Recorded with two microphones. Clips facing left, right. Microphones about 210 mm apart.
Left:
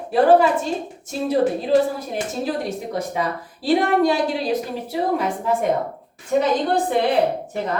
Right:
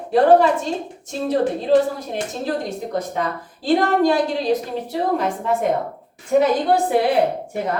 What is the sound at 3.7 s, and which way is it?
A woman's voice, 5° left (ahead or behind).